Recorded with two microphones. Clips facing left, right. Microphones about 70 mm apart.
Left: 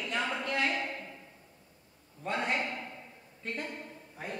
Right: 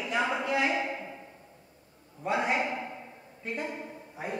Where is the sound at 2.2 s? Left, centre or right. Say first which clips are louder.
Right 4 dB; centre.